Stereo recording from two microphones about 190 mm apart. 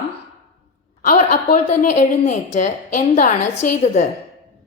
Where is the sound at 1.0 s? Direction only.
50° left (ahead or behind).